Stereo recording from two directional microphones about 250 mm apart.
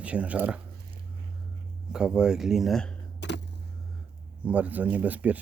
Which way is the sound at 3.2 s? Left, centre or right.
Left.